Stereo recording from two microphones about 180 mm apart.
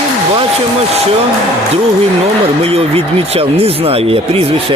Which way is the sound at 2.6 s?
35° right (ahead or behind).